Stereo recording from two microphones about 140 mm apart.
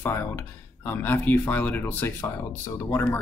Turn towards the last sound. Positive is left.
turn(degrees=15)  # may be behind; listen again after turning